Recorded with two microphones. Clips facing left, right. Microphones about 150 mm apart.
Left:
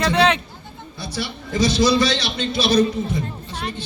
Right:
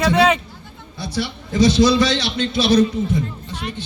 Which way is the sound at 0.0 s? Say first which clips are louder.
Right 2 dB; 5° right (ahead or behind).